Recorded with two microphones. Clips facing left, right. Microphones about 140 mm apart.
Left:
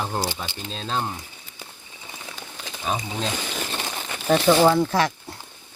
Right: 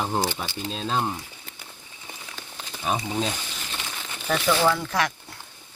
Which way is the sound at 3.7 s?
40° left (ahead or behind).